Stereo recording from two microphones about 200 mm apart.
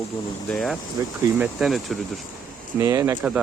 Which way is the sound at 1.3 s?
5° right (ahead or behind).